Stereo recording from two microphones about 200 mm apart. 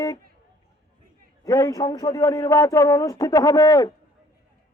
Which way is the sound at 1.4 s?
20° left (ahead or behind).